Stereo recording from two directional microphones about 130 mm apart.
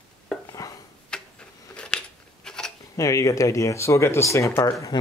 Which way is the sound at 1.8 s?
10° left (ahead or behind).